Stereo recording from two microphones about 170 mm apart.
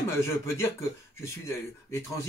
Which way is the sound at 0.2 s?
15° left (ahead or behind).